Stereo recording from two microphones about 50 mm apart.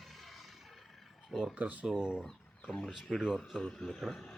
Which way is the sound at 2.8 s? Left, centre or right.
Centre.